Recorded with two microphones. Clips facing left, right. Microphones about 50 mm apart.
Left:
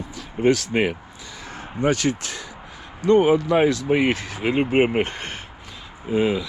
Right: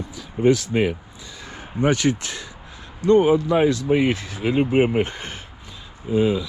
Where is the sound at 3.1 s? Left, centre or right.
Left.